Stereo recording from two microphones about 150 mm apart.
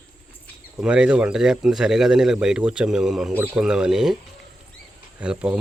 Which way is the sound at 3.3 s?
15° right (ahead or behind).